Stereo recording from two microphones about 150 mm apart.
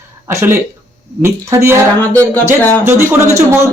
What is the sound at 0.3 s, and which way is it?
Speech, 15° right (ahead or behind).